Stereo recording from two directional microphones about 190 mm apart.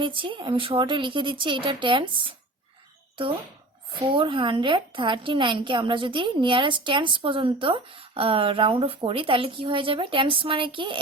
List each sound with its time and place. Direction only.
0.0 s a woman's voice: 25° right (ahead or behind)
4.0 s a woman's voice: 25° right (ahead or behind)